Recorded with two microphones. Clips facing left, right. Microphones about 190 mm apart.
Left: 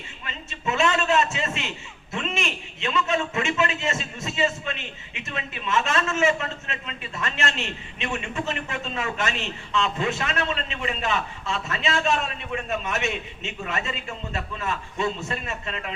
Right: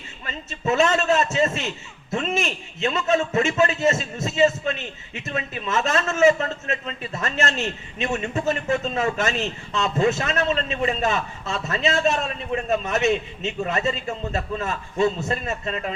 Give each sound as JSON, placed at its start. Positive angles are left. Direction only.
{"t": 0.3, "sound": "a man's voice", "side_deg": -40}